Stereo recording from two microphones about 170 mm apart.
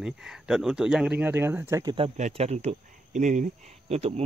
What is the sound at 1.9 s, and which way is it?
Speech, 35° right (ahead or behind).